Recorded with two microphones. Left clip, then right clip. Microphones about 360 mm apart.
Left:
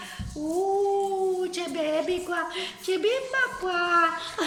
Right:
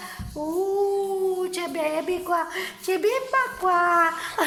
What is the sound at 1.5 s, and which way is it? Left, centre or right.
A woman's voice, centre.